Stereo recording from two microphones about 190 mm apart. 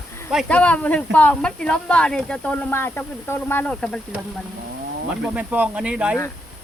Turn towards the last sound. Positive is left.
turn(degrees=-5)  # may be behind; listen again after turning